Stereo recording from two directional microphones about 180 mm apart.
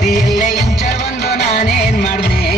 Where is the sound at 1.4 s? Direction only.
35° left (ahead or behind).